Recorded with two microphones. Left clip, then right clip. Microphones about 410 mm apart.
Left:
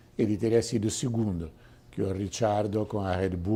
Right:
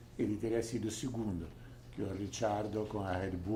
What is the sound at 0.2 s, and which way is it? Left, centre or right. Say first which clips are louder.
Speech: left 10 dB; left.